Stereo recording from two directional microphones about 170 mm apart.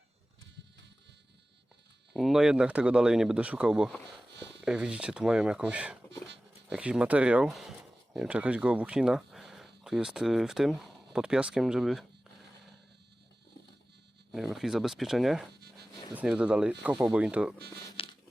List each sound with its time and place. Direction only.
2.1 s speech: centre (ahead or behind)
14.3 s speech: centre (ahead or behind)
18.0 s a sound: 35° left (ahead or behind)